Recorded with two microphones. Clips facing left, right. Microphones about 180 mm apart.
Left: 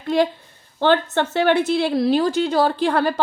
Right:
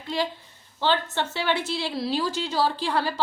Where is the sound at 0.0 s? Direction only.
55° left (ahead or behind).